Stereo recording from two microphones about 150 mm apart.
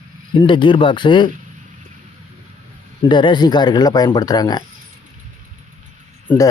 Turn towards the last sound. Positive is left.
turn(degrees=10)  # may be behind; listen again after turning